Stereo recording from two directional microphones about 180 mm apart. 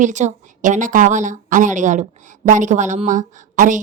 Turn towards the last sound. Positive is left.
turn(degrees=-45)  # may be behind; listen again after turning